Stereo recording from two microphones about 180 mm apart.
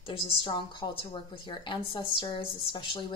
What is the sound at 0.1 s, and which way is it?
A woman's voice, 30° left (ahead or behind).